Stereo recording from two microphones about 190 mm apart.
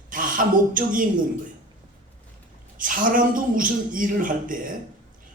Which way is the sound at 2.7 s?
45° right (ahead or behind).